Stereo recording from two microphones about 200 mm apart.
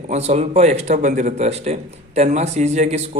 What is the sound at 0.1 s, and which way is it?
A man's voice, 35° right (ahead or behind).